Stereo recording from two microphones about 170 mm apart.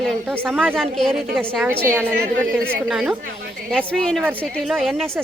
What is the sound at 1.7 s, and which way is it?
Speech, 15° right (ahead or behind).